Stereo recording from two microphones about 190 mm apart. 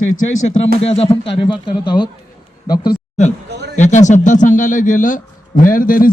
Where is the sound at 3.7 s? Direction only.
40° left (ahead or behind).